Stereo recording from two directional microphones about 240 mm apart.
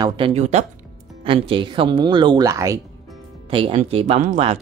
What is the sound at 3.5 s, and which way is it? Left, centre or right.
Speech, right.